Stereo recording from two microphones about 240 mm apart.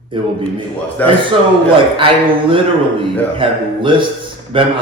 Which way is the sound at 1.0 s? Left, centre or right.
Centre.